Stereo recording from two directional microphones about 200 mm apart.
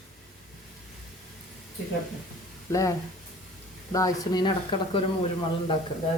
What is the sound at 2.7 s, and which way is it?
Speech, 15° left (ahead or behind).